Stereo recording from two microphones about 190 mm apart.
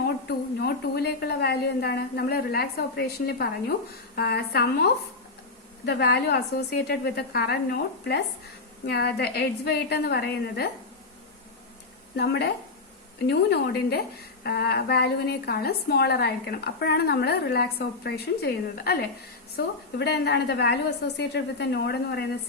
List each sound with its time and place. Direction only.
0.3 s a woman's voice: 55° left (ahead or behind)
12.1 s a woman's voice: 60° left (ahead or behind)